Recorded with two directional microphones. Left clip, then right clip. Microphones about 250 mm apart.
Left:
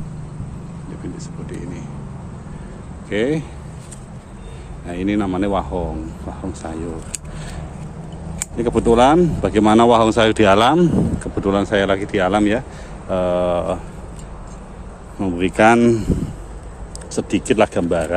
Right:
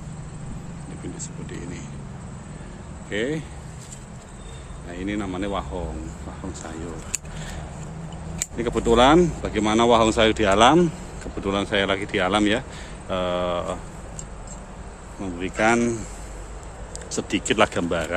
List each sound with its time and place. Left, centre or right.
1.5 s speech: centre
3.1 s speech: centre
4.8 s speech: centre
6.6 s a sound: centre
8.4 s speech: centre
15.1 s speech: centre
17.1 s speech: centre